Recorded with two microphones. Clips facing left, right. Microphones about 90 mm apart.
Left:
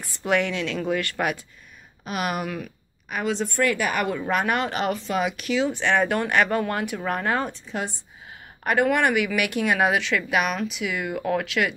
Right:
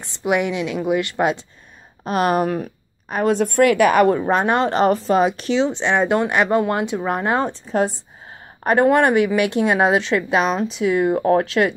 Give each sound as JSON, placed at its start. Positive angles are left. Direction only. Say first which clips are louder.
{"t": 0.0, "sound": "a woman's voice", "louder": "right 3 dB", "side_deg": -15}
{"t": 2.0, "sound": "speech", "louder": "right 9 dB", "side_deg": -40}
{"t": 4.0, "sound": "speech", "louder": "right 8 dB", "side_deg": -35}